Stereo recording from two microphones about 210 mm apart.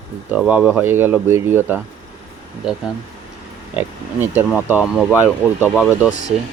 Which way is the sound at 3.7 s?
10° right (ahead or behind).